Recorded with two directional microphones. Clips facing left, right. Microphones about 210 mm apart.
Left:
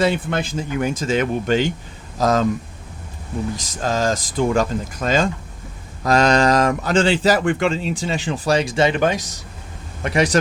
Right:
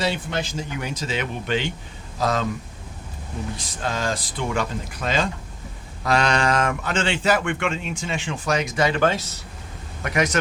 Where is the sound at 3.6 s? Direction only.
45° left (ahead or behind); by 9.4 s 15° left (ahead or behind).